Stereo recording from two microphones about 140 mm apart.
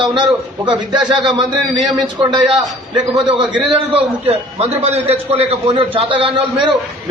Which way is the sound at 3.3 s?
35° right (ahead or behind).